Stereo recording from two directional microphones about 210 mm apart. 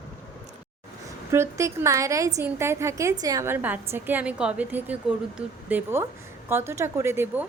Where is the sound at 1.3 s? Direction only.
15° right (ahead or behind).